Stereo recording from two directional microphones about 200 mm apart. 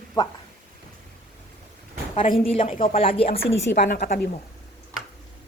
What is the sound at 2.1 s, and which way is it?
A woman's voice, 25° left (ahead or behind).